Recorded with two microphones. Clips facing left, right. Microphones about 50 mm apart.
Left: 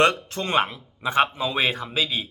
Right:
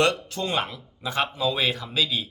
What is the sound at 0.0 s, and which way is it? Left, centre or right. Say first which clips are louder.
Speech: left 3 dB; left.